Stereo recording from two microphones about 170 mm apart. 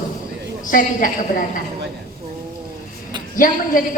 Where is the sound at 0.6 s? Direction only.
50° left (ahead or behind).